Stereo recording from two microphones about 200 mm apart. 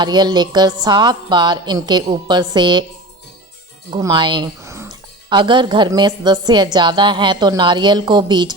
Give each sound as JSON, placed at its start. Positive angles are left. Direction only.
{"t": 0.0, "sound": "speech", "side_deg": -20}
{"t": 3.9, "sound": "speech", "side_deg": -20}